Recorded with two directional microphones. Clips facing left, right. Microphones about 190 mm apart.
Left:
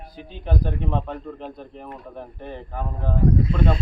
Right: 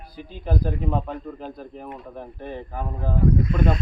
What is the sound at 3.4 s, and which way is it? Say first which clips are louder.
Speech: even; 30° left (ahead or behind).